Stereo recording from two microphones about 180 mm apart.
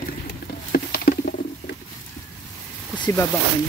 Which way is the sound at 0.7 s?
55° left (ahead or behind).